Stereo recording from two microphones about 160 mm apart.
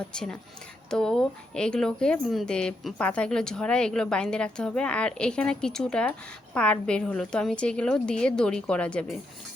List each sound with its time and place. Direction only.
0.1 s speech: 5° left (ahead or behind)